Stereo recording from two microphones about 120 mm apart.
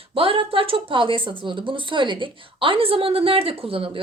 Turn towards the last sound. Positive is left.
turn(degrees=-50)  # may be behind; listen again after turning